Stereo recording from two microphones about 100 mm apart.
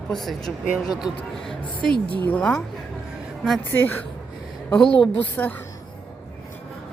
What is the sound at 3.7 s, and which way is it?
Speech, 20° left (ahead or behind).